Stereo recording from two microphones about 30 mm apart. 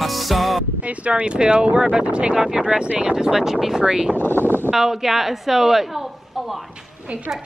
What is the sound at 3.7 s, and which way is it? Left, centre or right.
Speech, right.